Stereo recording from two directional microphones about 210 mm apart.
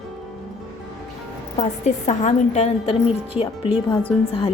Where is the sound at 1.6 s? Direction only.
30° left (ahead or behind).